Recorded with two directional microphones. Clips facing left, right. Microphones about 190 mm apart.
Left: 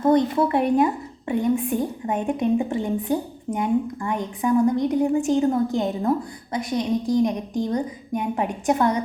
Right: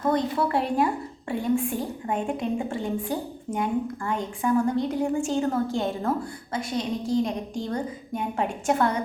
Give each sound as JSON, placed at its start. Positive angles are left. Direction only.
{"t": 0.0, "sound": "a woman's voice", "side_deg": 20}